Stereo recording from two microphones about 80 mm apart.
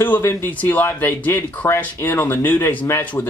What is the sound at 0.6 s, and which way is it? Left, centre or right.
Speech, left.